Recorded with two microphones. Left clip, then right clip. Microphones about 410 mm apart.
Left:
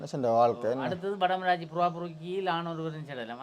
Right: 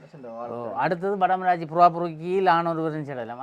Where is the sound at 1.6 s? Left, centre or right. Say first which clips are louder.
Right 11 dB; right.